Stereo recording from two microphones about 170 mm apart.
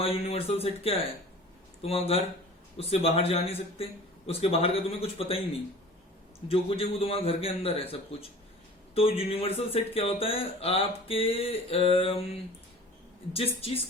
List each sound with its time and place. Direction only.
0.0 s speech: 35° left (ahead or behind)
6.5 s speech: 35° left (ahead or behind)
9.0 s speech: 35° left (ahead or behind)